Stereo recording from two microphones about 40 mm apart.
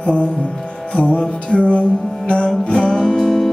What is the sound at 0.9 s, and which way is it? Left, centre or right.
Music, left.